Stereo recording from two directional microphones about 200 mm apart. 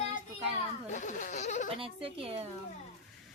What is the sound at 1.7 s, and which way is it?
Speech, 25° right (ahead or behind).